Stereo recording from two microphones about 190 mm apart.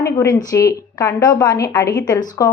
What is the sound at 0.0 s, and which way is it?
A woman's voice, 15° left (ahead or behind).